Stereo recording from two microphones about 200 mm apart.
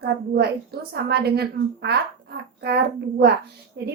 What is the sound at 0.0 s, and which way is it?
A woman's voice, 50° right (ahead or behind).